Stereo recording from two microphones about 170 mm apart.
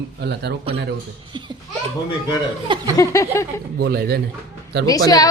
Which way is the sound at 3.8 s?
70° right (ahead or behind).